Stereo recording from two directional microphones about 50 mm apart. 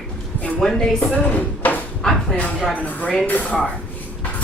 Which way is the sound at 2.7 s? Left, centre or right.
Left.